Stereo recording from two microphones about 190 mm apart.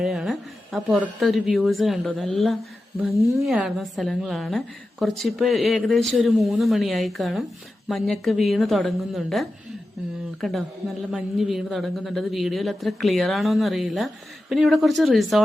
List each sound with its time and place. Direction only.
0.0 s a woman's voice: centre (ahead or behind)